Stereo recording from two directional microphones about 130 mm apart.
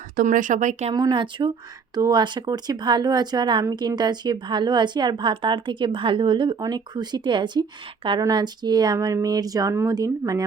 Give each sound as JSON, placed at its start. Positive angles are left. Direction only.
{"t": 0.2, "sound": "speech", "side_deg": -80}
{"t": 0.9, "sound": "speech", "side_deg": -35}